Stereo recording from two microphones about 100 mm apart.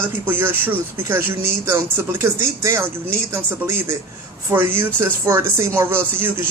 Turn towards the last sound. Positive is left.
turn(degrees=-20)  # may be behind; listen again after turning